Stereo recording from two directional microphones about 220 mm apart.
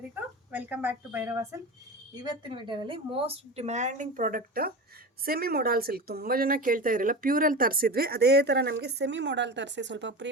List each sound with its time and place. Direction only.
0.5 s a woman's voice: 10° right (ahead or behind); by 10.2 s 55° right (ahead or behind)